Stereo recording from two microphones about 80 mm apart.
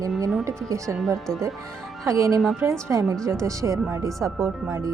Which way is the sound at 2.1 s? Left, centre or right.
Right.